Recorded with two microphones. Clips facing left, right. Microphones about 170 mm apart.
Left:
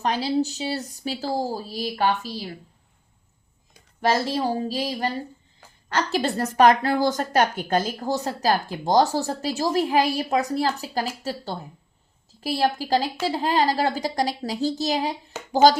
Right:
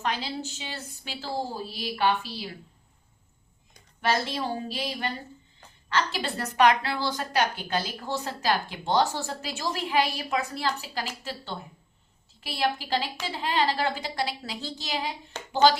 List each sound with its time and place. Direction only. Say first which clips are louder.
0.0 s a woman's voice: left 8 dB; 35° left (ahead or behind)
4.0 s a woman's voice: left 5 dB; 40° left (ahead or behind)
15.3 s a sound: left 3 dB; 5° left (ahead or behind)